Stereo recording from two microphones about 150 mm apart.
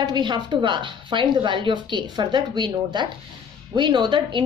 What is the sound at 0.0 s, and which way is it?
A woman's voice, 30° right (ahead or behind).